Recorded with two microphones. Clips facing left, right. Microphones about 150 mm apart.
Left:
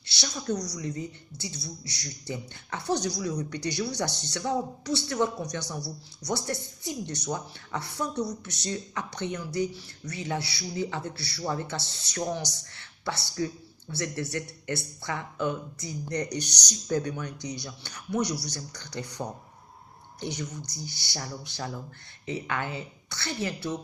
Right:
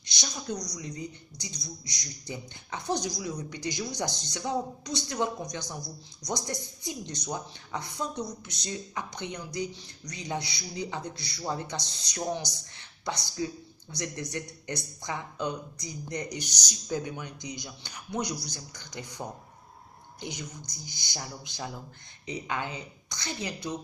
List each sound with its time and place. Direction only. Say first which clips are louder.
0.0 s speech: left 3 dB; 15° right (ahead or behind)
20.1 s speech: left 5 dB; 10° right (ahead or behind)